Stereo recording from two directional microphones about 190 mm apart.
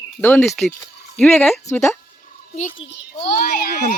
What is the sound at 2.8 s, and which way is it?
Speech, 55° left (ahead or behind).